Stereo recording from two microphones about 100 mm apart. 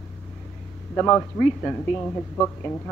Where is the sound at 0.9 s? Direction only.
20° left (ahead or behind).